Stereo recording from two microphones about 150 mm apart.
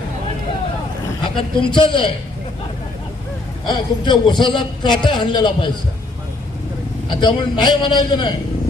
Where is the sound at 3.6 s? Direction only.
30° left (ahead or behind).